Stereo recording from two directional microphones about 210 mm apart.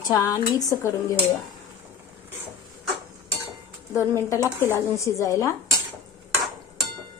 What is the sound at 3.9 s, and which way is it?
A woman's voice, 15° left (ahead or behind).